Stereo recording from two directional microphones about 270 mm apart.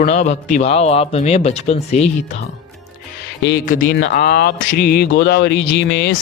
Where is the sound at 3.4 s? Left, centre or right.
Left.